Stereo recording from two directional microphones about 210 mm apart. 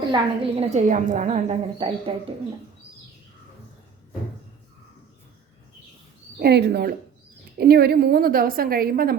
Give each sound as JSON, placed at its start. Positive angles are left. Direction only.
{"t": 0.1, "sound": "a woman's voice", "side_deg": -30}
{"t": 6.4, "sound": "a woman's voice", "side_deg": -50}